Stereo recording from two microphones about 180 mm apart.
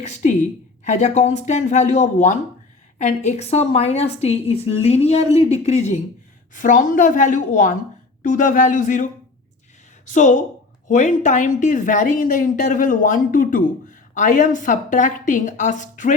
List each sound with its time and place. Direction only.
0.0 s a woman's voice: 40° left (ahead or behind)
10.1 s a woman's voice: 45° left (ahead or behind)